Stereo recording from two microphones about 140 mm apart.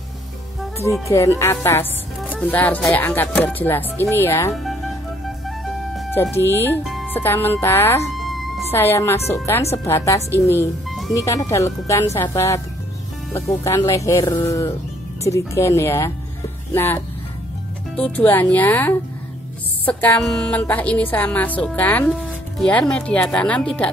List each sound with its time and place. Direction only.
1.0 s speech: 20° left (ahead or behind)
4.5 s music: centre (ahead or behind)
6.3 s speech: 15° left (ahead or behind)
8.1 s music: centre (ahead or behind)
8.7 s speech: 20° left (ahead or behind)
10.9 s music: centre (ahead or behind)
11.1 s speech: 20° left (ahead or behind)
19.8 s music: 15° left (ahead or behind)
20.2 s speech: 5° left (ahead or behind)